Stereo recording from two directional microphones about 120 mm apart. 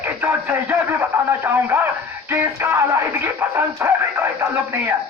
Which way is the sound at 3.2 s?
20° right (ahead or behind).